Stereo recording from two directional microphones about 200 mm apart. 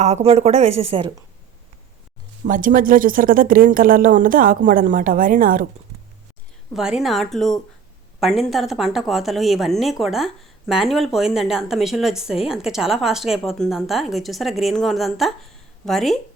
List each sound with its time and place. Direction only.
0.0 s speech: 30° right (ahead or behind)
2.5 s speech: 40° right (ahead or behind)
6.7 s a woman's voice: 5° right (ahead or behind)